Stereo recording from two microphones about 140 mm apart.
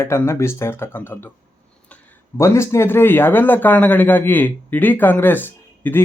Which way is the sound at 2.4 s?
20° left (ahead or behind).